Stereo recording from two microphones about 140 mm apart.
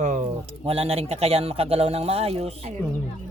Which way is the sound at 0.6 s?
45° right (ahead or behind).